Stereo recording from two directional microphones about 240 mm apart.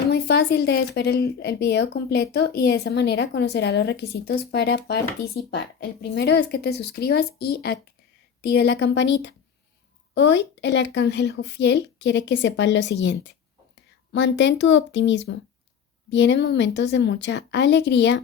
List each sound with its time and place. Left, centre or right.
0.1 s speech: left